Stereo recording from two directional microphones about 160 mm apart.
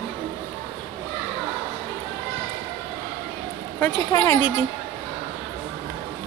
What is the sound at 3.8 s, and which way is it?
Speech, 20° left (ahead or behind).